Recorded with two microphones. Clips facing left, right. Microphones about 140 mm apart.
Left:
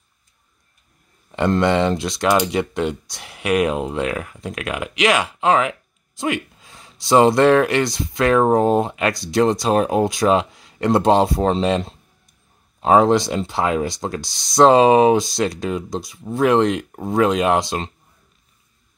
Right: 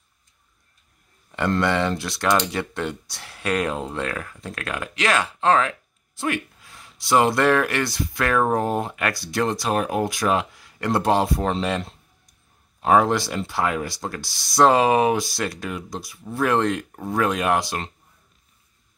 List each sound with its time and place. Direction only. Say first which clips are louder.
1.3 s speech: left 4 dB; 20° left (ahead or behind)